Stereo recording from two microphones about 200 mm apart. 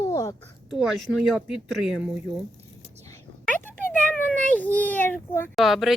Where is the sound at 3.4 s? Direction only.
10° left (ahead or behind).